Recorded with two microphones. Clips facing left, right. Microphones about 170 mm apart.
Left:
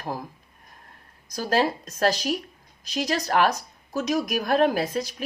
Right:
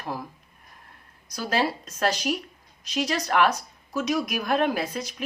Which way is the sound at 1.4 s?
40° left (ahead or behind).